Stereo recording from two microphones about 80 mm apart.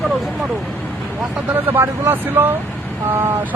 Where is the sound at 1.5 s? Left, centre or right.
Right.